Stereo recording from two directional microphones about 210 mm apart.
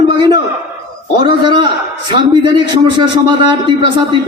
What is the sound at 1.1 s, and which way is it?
A man's voice, 20° right (ahead or behind).